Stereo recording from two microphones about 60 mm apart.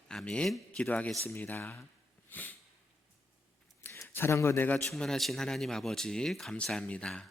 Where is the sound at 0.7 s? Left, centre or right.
Left.